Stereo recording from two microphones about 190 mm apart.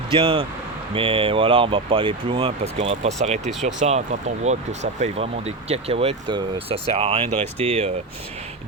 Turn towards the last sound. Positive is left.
turn(degrees=-35)  # may be behind; listen again after turning